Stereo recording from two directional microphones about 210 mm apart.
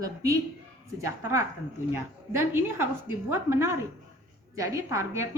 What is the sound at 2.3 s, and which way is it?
A woman's voice, 10° right (ahead or behind).